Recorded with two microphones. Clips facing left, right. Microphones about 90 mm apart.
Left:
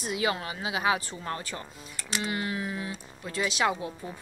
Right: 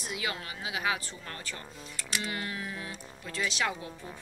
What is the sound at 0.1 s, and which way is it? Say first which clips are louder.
A woman's voice: left 7 dB; 30° left (ahead or behind).